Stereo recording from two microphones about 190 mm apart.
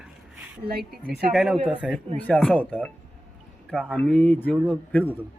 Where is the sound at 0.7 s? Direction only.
55° right (ahead or behind).